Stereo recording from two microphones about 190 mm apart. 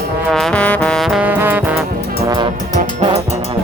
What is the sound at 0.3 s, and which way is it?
Music, centre (ahead or behind).